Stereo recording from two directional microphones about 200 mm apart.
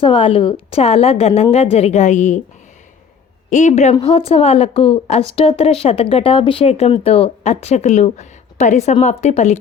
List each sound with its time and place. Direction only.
0.0 s a woman's voice: 25° left (ahead or behind)
3.5 s a woman's voice: 35° left (ahead or behind)